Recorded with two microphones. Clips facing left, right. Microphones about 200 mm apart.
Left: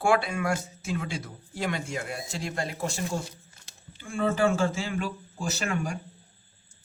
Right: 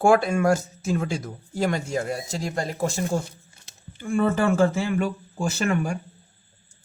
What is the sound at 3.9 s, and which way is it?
Speech, 55° right (ahead or behind).